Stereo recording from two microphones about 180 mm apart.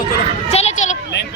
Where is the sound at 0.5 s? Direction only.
40° left (ahead or behind).